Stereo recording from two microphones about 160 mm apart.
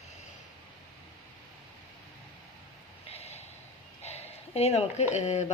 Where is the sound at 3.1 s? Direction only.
40° left (ahead or behind).